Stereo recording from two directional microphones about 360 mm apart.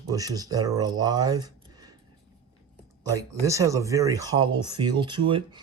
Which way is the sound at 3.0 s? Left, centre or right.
Centre.